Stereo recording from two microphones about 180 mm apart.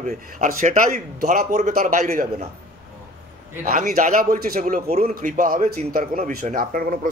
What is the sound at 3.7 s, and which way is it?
A man's voice, 45° right (ahead or behind).